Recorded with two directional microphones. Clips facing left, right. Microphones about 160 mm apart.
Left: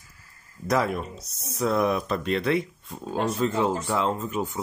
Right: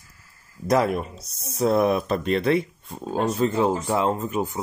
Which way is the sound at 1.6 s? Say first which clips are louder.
Right 4 dB; 35° right (ahead or behind).